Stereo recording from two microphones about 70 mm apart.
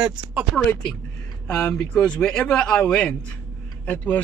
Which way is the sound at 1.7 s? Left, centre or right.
Centre.